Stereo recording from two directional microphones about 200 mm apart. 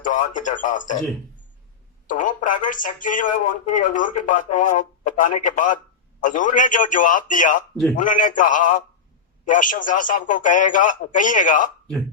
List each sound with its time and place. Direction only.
0.0 s speech: 40° left (ahead or behind)
2.0 s speech: 40° left (ahead or behind)